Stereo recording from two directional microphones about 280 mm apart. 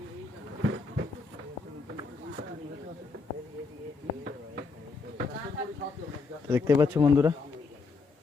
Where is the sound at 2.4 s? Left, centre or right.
Right.